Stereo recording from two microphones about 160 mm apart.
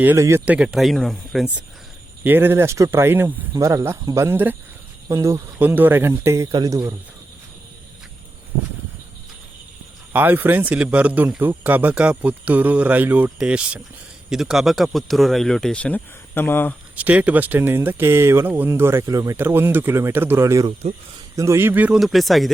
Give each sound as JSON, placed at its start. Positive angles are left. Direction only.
{"t": 0.0, "sound": "speech", "side_deg": -15}
{"t": 2.2, "sound": "speech", "side_deg": -15}
{"t": 10.1, "sound": "speech", "side_deg": -10}
{"t": 16.9, "sound": "speech", "side_deg": -10}